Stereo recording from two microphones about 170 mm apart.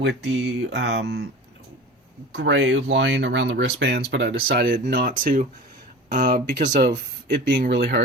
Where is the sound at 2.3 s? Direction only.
90° right; by 5.4 s 55° right (ahead or behind).